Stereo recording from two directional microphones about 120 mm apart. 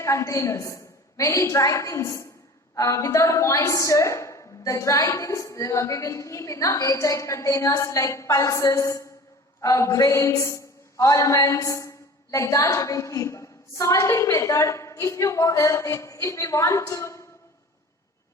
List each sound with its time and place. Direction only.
0.0 s a woman's voice: 25° left (ahead or behind)